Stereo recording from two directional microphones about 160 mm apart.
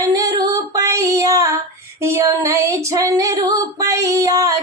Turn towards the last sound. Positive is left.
turn(degrees=-20)  # may be behind; listen again after turning